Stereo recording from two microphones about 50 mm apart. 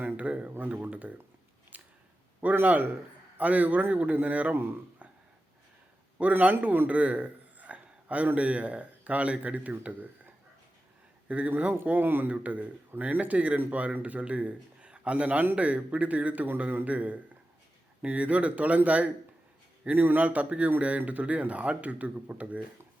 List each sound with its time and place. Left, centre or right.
0.0 s speech: right
1.7 s a sound: right
2.6 s speech: right
6.4 s speech: right
6.8 s a sound: right
8.4 s speech: right
11.9 s speech: right
12.3 s speech: right